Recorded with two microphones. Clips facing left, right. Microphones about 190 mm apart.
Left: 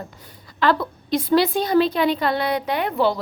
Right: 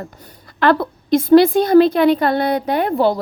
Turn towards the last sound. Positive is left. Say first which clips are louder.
# right 5 dB
turn(degrees=-45)  # may be behind; listen again after turning